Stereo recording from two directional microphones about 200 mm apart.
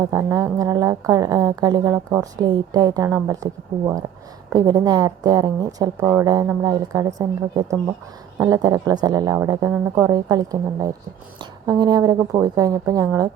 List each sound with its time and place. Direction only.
0.0 s a woman's voice: 15° right (ahead or behind)
10.1 s a woman's voice: 20° right (ahead or behind)